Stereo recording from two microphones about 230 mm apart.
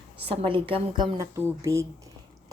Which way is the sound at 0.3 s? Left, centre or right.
Right.